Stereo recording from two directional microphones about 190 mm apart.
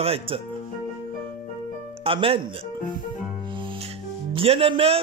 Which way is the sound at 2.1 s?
30° right (ahead or behind).